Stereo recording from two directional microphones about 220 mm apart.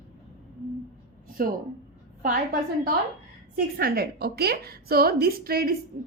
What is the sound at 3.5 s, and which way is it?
A woman's voice, 45° right (ahead or behind).